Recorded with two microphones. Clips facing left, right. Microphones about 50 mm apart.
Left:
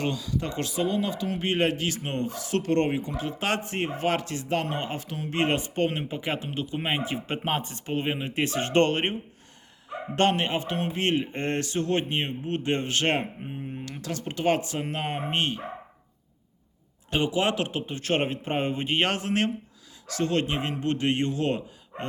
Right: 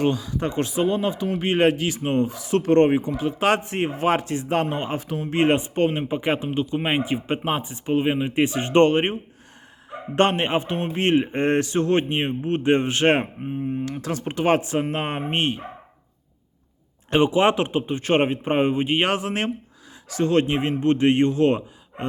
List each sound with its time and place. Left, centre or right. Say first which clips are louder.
0.0 s a man's voice: right 6 dB; right
10.2 s a man's voice: right 4 dB; right
13.4 s speech: right 9 dB; centre
14.3 s a man's voice: right 4 dB; right
17.1 s a man's voice: right 7 dB; right